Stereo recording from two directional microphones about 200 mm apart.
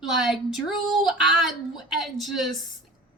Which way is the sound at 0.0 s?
Centre (ahead or behind).